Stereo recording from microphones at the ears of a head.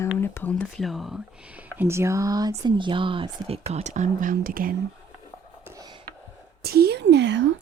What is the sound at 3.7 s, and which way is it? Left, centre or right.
Speech, right.